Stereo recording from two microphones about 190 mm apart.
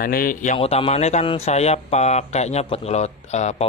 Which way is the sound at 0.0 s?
50° left (ahead or behind).